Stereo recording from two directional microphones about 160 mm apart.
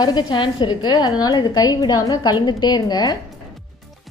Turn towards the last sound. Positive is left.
turn(degrees=25)  # may be behind; listen again after turning